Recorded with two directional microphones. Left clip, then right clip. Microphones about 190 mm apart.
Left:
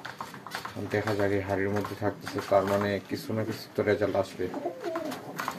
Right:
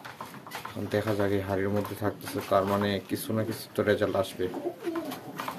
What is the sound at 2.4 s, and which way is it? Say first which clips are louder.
Speech: left 1 dB; 20° right (ahead or behind).